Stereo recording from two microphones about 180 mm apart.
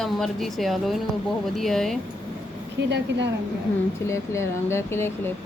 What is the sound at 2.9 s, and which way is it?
Speech, 75° right (ahead or behind).